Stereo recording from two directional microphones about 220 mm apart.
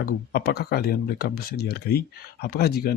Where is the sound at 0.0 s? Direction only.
45° left (ahead or behind).